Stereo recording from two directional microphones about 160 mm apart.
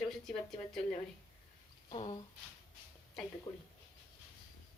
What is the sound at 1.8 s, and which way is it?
Speech, 30° left (ahead or behind).